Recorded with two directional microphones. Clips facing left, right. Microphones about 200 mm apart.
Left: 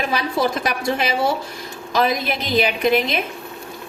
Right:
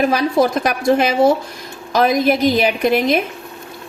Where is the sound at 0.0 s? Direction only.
45° right (ahead or behind).